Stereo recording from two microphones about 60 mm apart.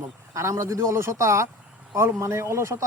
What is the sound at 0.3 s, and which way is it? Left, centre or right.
Speech, right.